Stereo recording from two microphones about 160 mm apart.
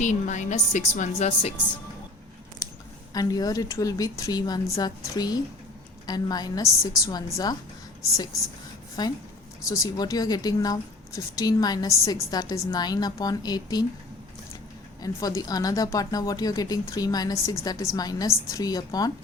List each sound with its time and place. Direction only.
0.0 s a woman's voice: 50° left (ahead or behind)
2.6 s a sound: 20° left (ahead or behind)
3.1 s a woman's voice: 25° left (ahead or behind)
9.0 s a woman's voice: 25° left (ahead or behind)
15.0 s a woman's voice: 20° left (ahead or behind)